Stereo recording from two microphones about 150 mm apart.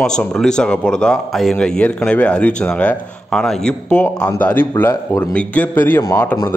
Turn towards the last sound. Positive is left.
turn(degrees=20)  # may be behind; listen again after turning